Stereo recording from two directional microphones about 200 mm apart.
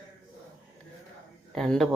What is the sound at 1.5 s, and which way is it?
Speech, centre (ahead or behind).